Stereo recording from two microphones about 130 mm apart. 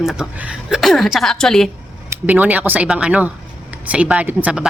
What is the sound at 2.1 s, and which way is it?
Speech, 15° right (ahead or behind).